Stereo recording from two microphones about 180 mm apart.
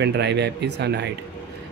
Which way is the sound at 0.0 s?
70° right (ahead or behind).